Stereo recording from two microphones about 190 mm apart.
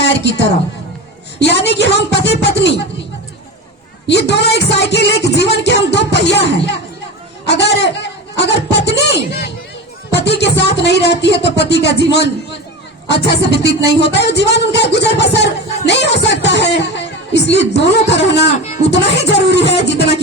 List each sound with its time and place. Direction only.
0.0 s a sound: 65° left (ahead or behind)
1.6 s music: 65° left (ahead or behind)
4.1 s music: 60° left (ahead or behind)
7.4 s a man's voice: 65° left (ahead or behind)
10.1 s music: 65° left (ahead or behind)
13.1 s music: 60° left (ahead or behind)